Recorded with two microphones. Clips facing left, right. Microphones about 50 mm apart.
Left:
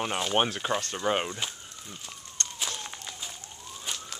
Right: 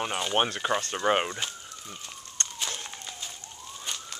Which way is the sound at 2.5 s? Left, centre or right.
Centre.